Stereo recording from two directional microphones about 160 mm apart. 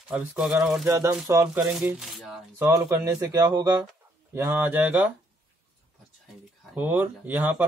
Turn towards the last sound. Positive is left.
turn(degrees=-10)  # may be behind; listen again after turning